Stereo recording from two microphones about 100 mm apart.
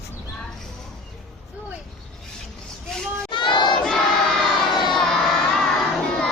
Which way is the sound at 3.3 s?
55° left (ahead or behind).